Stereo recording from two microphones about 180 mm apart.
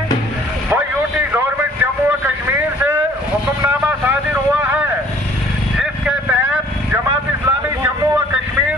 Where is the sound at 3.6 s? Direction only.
10° right (ahead or behind).